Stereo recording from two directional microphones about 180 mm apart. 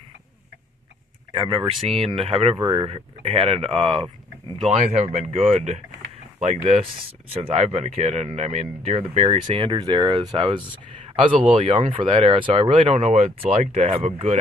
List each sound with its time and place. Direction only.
1.3 s speech: 30° right (ahead or behind)